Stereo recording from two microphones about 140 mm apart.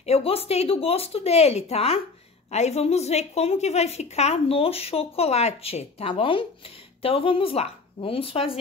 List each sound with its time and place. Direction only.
0.0 s a woman's voice: 45° left (ahead or behind)